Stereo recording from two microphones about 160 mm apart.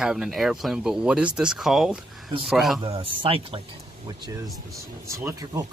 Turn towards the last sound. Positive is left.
turn(degrees=-20)  # may be behind; listen again after turning